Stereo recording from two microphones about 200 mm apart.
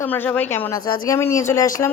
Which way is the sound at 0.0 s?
10° left (ahead or behind).